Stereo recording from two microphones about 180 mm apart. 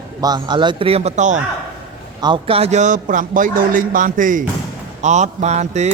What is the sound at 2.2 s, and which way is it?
A man's voice, 30° right (ahead or behind).